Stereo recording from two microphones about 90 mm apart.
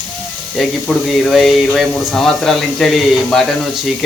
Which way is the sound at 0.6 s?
Centre (ahead or behind).